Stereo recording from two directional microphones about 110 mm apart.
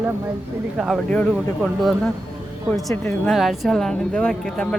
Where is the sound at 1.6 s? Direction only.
Centre (ahead or behind).